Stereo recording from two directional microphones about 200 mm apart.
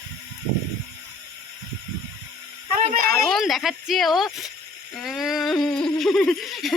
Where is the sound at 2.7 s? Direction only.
45° right (ahead or behind).